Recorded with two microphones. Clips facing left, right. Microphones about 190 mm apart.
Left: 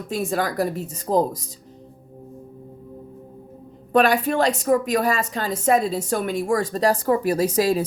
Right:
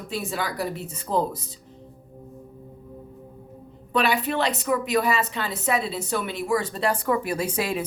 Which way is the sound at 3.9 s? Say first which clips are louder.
Left 5 dB; 45° left (ahead or behind).